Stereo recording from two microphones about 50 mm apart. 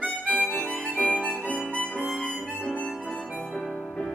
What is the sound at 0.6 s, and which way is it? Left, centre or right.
Music, left.